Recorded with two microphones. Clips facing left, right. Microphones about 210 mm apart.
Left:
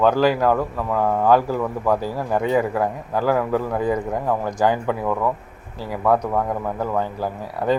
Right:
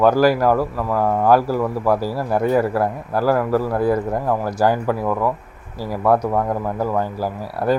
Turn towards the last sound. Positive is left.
turn(degrees=-10)  # may be behind; listen again after turning